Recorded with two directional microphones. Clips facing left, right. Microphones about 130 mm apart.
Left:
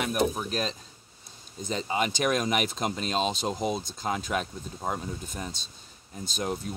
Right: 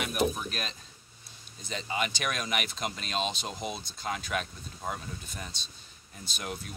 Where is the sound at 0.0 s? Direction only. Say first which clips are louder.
Left 3 dB; 30° left (ahead or behind).